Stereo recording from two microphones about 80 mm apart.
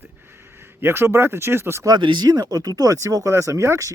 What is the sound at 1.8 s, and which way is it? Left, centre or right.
Speech, right.